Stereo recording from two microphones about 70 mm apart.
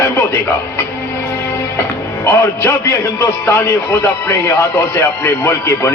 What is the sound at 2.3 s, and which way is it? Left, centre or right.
A man's voice, left.